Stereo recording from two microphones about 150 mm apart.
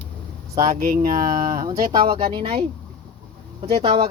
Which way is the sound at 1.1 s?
65° right (ahead or behind).